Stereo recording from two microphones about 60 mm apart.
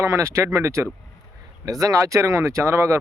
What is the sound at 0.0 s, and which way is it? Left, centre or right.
Speech, right.